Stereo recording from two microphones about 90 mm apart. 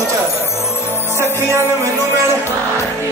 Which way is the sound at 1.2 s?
25° right (ahead or behind).